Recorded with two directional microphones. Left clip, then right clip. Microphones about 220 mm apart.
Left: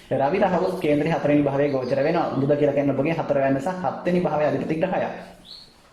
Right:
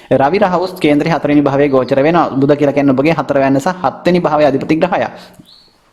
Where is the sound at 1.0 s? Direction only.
40° right (ahead or behind).